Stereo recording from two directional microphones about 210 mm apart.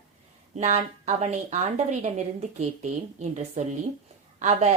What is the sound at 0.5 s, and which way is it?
A woman's voice, 35° right (ahead or behind).